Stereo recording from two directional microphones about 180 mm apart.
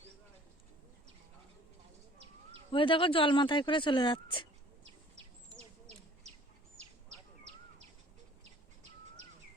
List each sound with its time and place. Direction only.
2.7 s speech: 30° left (ahead or behind)